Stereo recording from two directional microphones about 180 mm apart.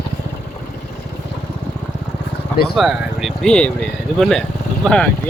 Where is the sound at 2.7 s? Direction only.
Centre (ahead or behind).